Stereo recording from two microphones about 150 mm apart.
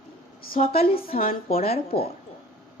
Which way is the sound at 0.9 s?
75° left (ahead or behind).